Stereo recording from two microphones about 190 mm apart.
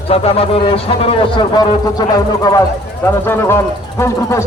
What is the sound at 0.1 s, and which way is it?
Speech, 30° left (ahead or behind).